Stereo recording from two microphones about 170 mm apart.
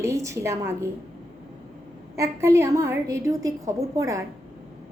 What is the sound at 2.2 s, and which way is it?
A woman's voice, 20° right (ahead or behind).